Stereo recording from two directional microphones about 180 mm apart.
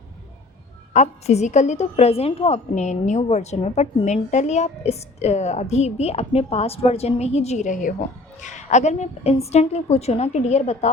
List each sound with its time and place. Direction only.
0.9 s a woman's voice: 40° left (ahead or behind)